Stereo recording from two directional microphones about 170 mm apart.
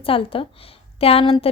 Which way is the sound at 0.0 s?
30° left (ahead or behind).